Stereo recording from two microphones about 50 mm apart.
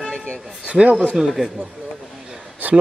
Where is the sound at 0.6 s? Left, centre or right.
Right.